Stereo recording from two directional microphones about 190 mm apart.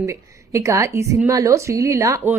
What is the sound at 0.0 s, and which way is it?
A woman's voice, 15° right (ahead or behind).